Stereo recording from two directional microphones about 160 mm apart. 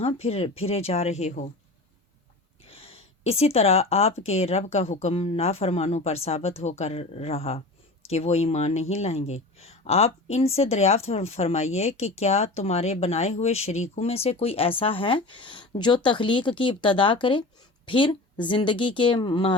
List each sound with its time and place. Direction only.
0.0 s speech: 40° left (ahead or behind)
2.6 s speech: 40° left (ahead or behind)